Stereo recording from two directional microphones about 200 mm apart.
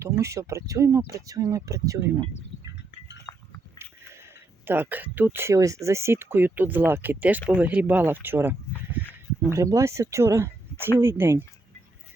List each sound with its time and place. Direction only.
0.0 s speech: 15° right (ahead or behind)
3.3 s goat: 20° left (ahead or behind)
4.6 s speech: 10° right (ahead or behind)